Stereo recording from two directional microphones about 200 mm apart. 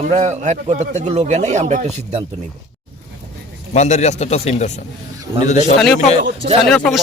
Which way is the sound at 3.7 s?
35° left (ahead or behind).